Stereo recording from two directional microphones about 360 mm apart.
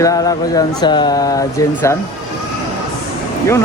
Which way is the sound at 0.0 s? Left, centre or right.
Centre.